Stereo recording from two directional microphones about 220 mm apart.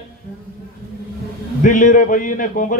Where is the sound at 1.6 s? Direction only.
35° left (ahead or behind).